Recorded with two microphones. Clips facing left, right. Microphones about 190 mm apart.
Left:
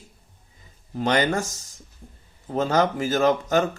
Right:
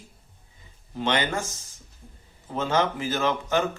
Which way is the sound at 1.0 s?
40° left (ahead or behind).